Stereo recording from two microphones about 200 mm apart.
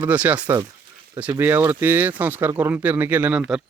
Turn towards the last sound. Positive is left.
turn(degrees=-5)  # may be behind; listen again after turning